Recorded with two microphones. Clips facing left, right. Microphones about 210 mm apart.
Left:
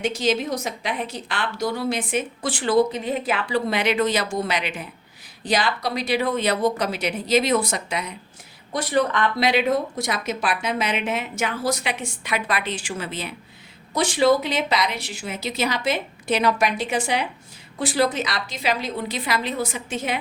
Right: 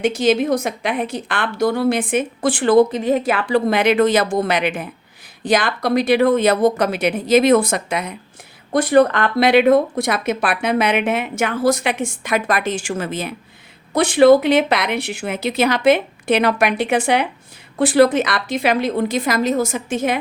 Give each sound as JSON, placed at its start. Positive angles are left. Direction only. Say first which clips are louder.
{"t": 0.0, "sound": "a woman's voice", "louder": "right 6 dB", "side_deg": -55}
{"t": 13.9, "sound": "a woman's voice", "louder": "right 8 dB", "side_deg": -60}